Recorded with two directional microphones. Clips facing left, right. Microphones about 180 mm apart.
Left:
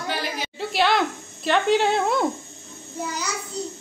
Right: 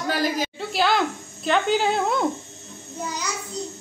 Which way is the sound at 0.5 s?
Centre (ahead or behind).